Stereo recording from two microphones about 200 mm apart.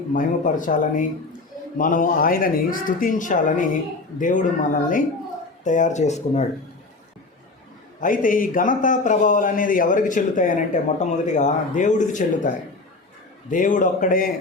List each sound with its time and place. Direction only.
0.1 s a man's voice: 40° left (ahead or behind)
8.0 s a man's voice: 40° left (ahead or behind)
13.5 s a man's voice: 40° left (ahead or behind)